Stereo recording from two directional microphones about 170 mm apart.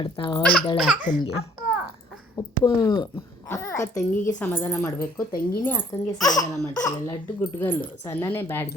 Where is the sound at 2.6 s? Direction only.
25° left (ahead or behind).